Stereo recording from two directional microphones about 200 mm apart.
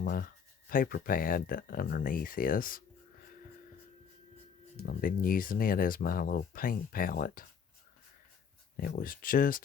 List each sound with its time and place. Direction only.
0.0 s speech: 45° left (ahead or behind)
4.9 s speech: 45° left (ahead or behind)
8.7 s speech: 45° left (ahead or behind)